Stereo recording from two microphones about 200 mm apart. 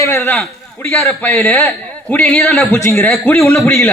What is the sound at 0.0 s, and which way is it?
A woman's voice, 10° left (ahead or behind).